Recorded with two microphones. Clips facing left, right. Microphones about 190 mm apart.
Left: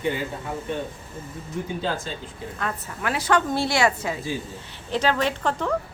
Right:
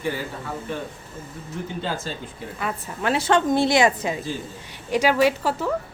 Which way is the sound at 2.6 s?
10° right (ahead or behind).